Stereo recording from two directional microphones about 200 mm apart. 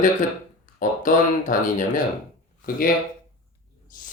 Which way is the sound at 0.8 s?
40° left (ahead or behind).